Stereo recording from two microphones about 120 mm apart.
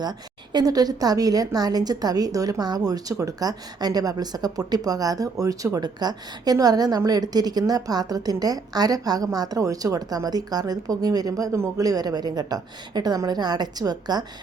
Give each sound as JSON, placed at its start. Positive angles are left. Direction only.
{"t": 0.0, "sound": "a woman's voice", "side_deg": -35}